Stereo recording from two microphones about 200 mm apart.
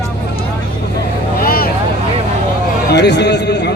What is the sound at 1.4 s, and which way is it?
Vehicle, 45° left (ahead or behind).